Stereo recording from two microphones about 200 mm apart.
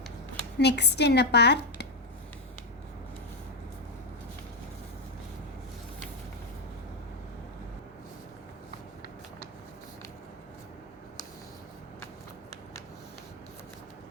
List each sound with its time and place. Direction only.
0.6 s a woman's voice: 55° left (ahead or behind)